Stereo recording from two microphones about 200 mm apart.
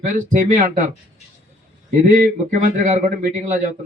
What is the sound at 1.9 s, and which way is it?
Speech, 40° right (ahead or behind).